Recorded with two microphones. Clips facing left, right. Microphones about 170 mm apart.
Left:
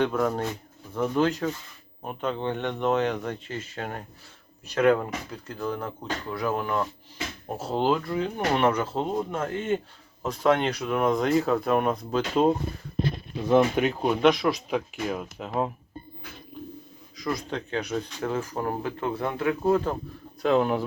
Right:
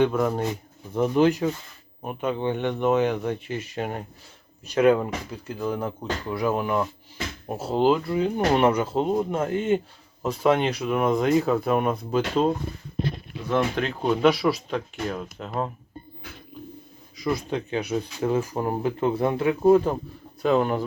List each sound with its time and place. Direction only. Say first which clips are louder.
0.0 s speech: right 3 dB; 5° right (ahead or behind)
13.7 s speech: even; 10° left (ahead or behind)
14.2 s speech: right 1 dB; 5° right (ahead or behind)
17.2 s speech: right 4 dB; 5° right (ahead or behind)
20.4 s speech: right 1 dB; centre (ahead or behind)